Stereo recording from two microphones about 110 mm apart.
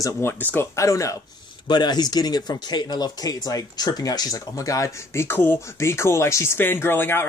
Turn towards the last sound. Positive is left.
turn(degrees=20)  # may be behind; listen again after turning